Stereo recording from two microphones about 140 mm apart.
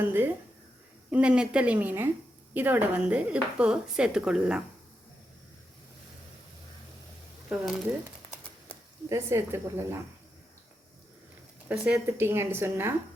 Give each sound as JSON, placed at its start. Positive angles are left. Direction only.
{"t": 0.0, "sound": "speech", "side_deg": -15}
{"t": 7.5, "sound": "speech", "side_deg": -5}
{"t": 9.0, "sound": "speech", "side_deg": -20}
{"t": 11.7, "sound": "speech", "side_deg": -10}